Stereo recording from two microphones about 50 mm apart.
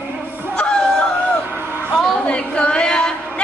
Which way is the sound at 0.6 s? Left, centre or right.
Centre.